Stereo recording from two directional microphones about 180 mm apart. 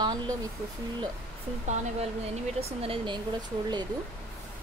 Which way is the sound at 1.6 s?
40° right (ahead or behind).